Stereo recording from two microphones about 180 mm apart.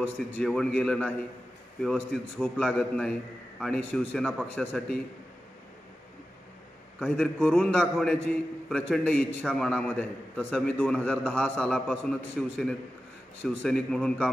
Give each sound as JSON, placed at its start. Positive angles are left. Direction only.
{"t": 0.0, "sound": "a man's voice", "side_deg": 5}
{"t": 7.0, "sound": "a man's voice", "side_deg": 5}